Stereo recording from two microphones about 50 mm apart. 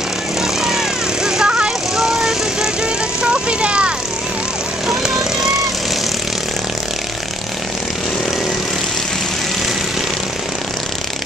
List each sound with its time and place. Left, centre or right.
0.4 s vehicle: centre
4.8 s vehicle: centre